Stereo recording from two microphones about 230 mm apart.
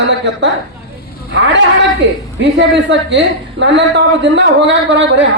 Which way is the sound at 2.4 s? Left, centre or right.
Right.